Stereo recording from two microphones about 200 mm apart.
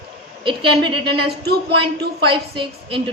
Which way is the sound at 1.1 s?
55° right (ahead or behind).